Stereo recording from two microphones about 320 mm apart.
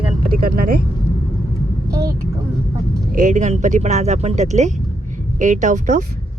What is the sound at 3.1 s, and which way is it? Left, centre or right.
Speech, right.